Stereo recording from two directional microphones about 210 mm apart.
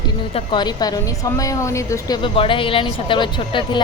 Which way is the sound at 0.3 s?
20° left (ahead or behind).